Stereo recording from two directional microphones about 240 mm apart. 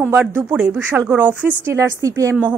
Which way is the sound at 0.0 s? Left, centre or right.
Centre.